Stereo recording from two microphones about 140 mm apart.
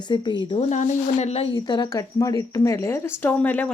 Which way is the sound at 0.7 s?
55° left (ahead or behind).